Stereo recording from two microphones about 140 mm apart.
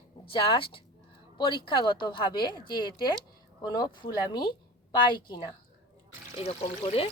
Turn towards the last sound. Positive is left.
turn(degrees=40)  # may be behind; listen again after turning